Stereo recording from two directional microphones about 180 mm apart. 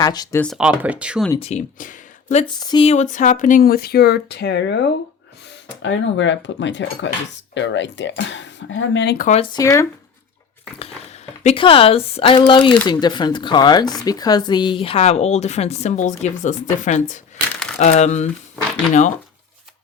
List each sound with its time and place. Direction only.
0.0 s speech: 20° left (ahead or behind)
0.3 s speech: 5° left (ahead or behind)
0.6 s speech: 10° right (ahead or behind)
1.4 s speech: 35° left (ahead or behind)
2.4 s speech: 25° left (ahead or behind)
2.9 s speech: 40° left (ahead or behind); by 4.9 s 70° left (ahead or behind)
5.8 s speech: 90° left
9.1 s speech: 45° left (ahead or behind)
9.4 s speech: 20° left (ahead or behind)
11.4 s speech: 30° left (ahead or behind)